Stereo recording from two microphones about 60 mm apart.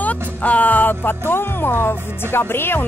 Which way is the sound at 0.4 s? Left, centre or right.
Left.